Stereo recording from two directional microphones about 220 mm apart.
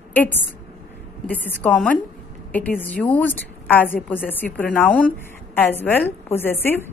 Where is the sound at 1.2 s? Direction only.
5° left (ahead or behind).